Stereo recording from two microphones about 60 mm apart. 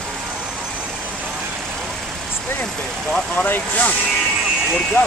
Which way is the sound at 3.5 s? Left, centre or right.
Left.